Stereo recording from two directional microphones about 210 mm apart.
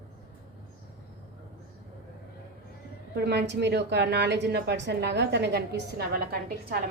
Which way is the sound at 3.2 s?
55° right (ahead or behind).